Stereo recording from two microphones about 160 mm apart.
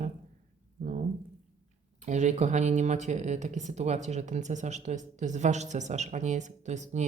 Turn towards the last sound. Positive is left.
turn(degrees=-45)  # may be behind; listen again after turning